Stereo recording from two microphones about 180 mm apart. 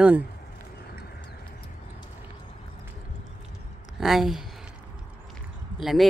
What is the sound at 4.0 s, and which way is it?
Speech, centre (ahead or behind).